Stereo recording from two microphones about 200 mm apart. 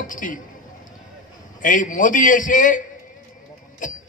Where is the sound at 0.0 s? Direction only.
40° left (ahead or behind).